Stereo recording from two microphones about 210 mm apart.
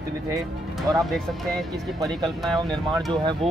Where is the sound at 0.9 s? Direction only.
15° right (ahead or behind).